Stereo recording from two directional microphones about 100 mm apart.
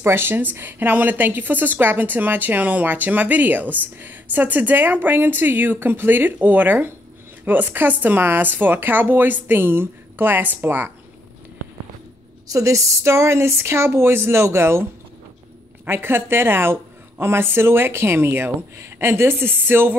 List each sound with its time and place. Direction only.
0.0 s a woman's voice: 25° right (ahead or behind)
12.4 s a woman's voice: 30° right (ahead or behind)